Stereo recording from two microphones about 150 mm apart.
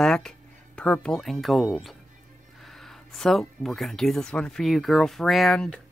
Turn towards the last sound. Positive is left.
turn(degrees=5)  # may be behind; listen again after turning